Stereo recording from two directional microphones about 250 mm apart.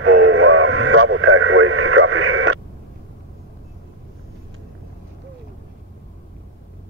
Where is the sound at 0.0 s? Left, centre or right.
Right.